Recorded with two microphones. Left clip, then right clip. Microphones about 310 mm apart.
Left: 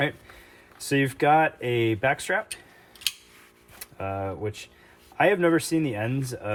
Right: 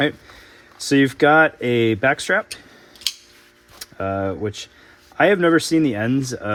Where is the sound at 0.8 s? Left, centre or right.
Right.